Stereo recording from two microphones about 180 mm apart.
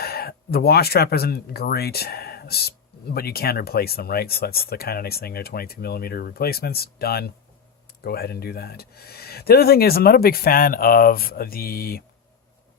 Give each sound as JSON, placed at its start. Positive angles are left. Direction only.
{"t": 0.0, "sound": "speech", "side_deg": 60}